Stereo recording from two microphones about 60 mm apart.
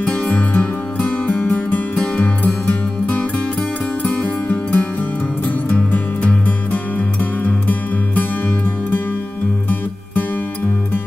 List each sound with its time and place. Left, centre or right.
0.0 s music: centre